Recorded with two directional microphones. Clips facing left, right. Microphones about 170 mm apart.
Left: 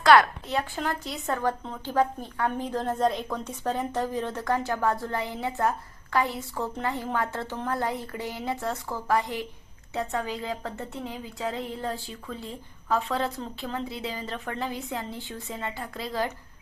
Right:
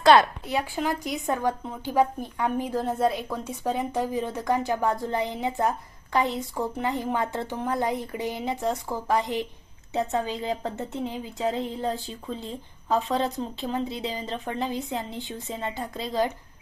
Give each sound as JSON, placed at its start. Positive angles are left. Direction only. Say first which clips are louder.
{"t": 0.0, "sound": "a woman's voice", "louder": "right 1 dB", "side_deg": -20}